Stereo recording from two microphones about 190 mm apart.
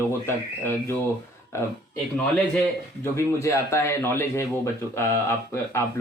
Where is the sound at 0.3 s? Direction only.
10° left (ahead or behind).